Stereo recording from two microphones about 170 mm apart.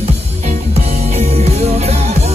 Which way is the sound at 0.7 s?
40° right (ahead or behind).